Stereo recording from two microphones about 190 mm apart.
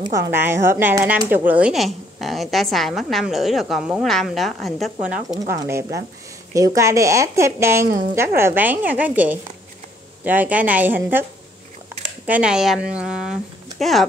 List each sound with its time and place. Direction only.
0.3 s speech: 10° right (ahead or behind)
12.3 s speech: 5° right (ahead or behind)